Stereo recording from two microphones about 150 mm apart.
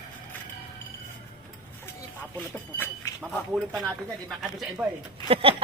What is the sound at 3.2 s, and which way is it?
Speech, 5° right (ahead or behind).